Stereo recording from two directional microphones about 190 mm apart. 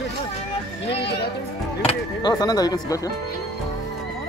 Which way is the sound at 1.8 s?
20° left (ahead or behind).